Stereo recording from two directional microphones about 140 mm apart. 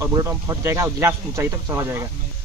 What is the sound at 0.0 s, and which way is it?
Speech, 20° right (ahead or behind).